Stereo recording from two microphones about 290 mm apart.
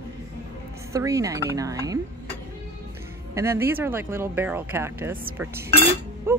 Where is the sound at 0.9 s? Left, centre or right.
Centre.